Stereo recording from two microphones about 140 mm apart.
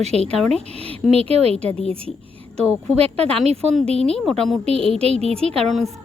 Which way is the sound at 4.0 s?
5° left (ahead or behind).